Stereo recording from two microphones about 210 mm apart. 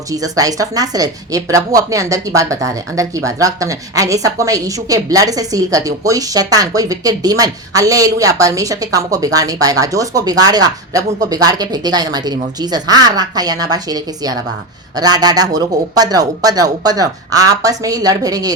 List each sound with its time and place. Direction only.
0.1 s speech: 15° right (ahead or behind)